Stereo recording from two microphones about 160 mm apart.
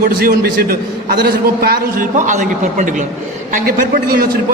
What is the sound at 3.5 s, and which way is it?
Speech, 65° right (ahead or behind).